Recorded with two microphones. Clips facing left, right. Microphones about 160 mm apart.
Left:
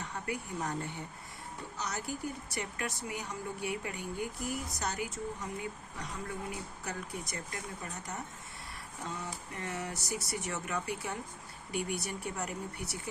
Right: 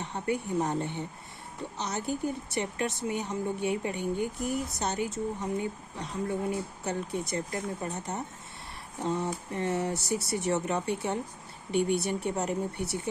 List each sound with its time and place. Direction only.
0.0 s speech: 25° right (ahead or behind)